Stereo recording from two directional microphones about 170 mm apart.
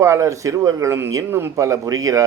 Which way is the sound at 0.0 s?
20° right (ahead or behind).